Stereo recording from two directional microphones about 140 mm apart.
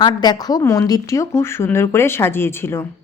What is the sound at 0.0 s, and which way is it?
Speech, 30° left (ahead or behind).